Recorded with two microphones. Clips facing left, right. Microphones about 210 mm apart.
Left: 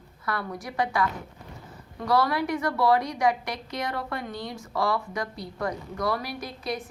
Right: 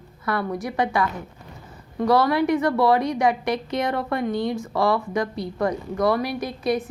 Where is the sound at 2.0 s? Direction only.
25° right (ahead or behind).